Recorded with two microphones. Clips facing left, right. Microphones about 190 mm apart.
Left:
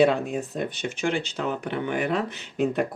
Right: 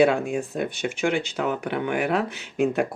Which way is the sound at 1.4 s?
55° right (ahead or behind).